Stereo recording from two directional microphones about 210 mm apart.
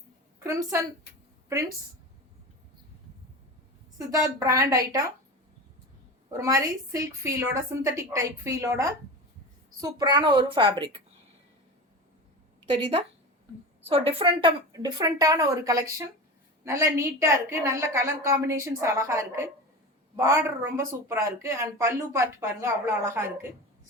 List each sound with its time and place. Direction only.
0.3 s a woman's voice: 15° right (ahead or behind)
3.9 s speech: 15° right (ahead or behind)
6.3 s a woman's voice: 15° right (ahead or behind)
13.8 s speech: 25° right (ahead or behind)